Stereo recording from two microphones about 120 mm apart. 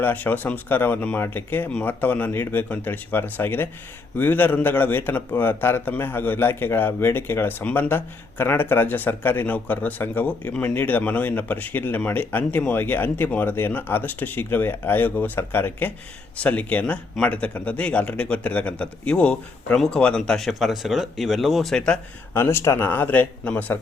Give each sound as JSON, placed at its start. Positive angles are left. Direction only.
{"t": 0.0, "sound": "a man's voice", "side_deg": 15}
{"t": 22.4, "sound": "a man's voice", "side_deg": 20}